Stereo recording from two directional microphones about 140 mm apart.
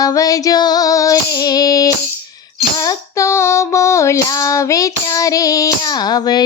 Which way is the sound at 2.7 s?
25° left (ahead or behind).